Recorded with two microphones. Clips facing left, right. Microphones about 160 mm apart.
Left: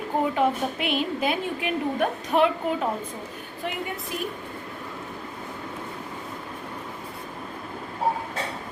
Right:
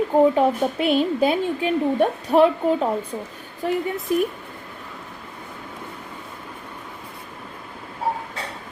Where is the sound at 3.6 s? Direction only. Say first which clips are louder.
Right 9 dB; 35° right (ahead or behind).